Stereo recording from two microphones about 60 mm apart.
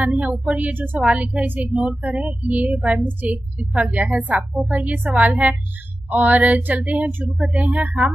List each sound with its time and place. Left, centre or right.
0.0 s a sound: right
0.5 s speech: right
0.9 s a woman's voice: centre
1.2 s a woman's voice: right
3.1 s a woman's voice: right